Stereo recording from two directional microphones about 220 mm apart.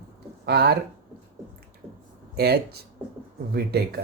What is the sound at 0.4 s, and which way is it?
Speech, 45° right (ahead or behind).